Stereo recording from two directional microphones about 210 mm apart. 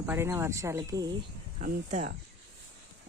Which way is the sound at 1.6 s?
35° right (ahead or behind).